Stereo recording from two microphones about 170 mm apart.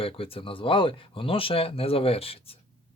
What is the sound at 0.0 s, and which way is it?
Speech, 35° left (ahead or behind).